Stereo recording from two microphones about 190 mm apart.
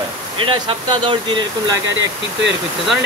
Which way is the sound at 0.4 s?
30° right (ahead or behind).